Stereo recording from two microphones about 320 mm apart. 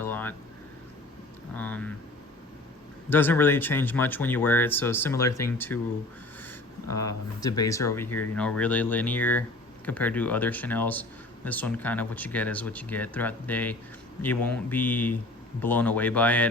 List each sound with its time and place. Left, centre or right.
0.0 s boiling: centre
1.5 s a sound: centre
3.1 s speech: centre
6.9 s speech: centre